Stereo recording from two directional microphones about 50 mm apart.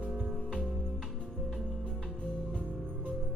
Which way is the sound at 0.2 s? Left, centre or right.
Right.